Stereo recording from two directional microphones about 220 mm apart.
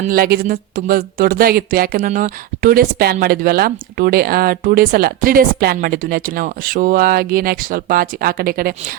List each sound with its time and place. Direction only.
0.0 s speech: 40° right (ahead or behind)